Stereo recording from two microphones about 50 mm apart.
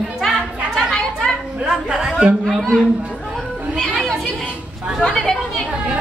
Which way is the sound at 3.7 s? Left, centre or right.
Centre.